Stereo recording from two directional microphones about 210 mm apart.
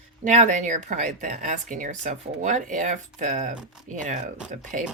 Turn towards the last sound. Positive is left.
turn(degrees=-35)  # may be behind; listen again after turning